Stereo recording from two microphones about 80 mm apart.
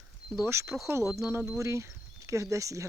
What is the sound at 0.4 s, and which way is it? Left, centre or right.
Speech, right.